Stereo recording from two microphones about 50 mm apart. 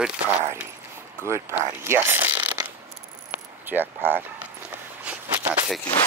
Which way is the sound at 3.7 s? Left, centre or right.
Centre.